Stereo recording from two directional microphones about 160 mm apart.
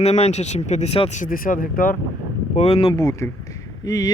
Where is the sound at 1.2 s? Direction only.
60° left (ahead or behind).